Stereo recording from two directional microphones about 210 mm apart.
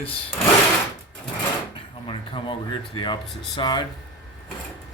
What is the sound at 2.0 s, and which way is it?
Speech, 25° left (ahead or behind).